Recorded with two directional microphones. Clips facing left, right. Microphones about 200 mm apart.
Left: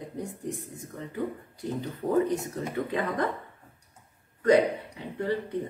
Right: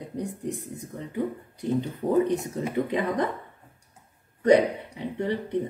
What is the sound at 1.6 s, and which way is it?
Speech, 20° right (ahead or behind).